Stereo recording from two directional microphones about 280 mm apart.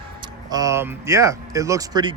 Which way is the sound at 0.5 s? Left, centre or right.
Centre.